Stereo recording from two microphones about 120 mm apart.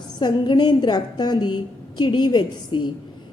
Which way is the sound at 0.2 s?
40° left (ahead or behind).